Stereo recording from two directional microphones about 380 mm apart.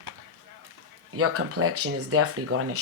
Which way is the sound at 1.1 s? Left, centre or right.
Right.